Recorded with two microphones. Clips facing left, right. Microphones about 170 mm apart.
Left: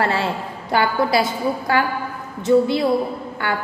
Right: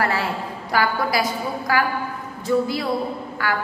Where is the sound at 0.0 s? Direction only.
25° left (ahead or behind).